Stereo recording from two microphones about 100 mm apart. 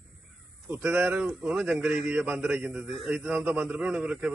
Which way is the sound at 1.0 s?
15° right (ahead or behind).